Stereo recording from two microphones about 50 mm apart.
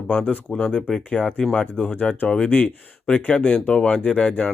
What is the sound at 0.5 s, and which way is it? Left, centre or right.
Speech, centre.